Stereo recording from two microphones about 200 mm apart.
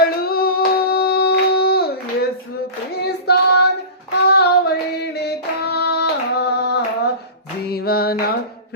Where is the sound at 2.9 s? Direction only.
55° left (ahead or behind).